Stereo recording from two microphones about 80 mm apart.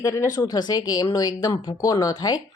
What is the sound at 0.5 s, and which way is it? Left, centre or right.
Speech, left.